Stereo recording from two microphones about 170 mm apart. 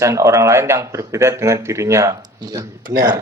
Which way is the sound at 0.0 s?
15° right (ahead or behind).